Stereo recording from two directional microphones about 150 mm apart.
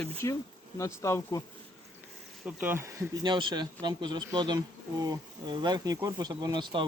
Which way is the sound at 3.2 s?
30° right (ahead or behind).